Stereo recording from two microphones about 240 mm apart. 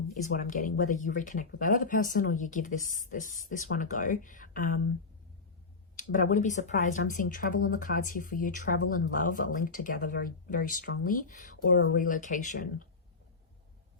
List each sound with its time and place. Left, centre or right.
0.3 s speech: left
6.0 s a sound: left
6.3 s speech: left